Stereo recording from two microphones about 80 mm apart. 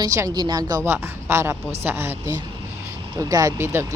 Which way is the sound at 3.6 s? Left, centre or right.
Right.